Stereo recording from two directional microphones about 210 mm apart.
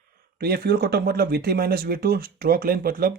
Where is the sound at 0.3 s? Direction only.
45° right (ahead or behind).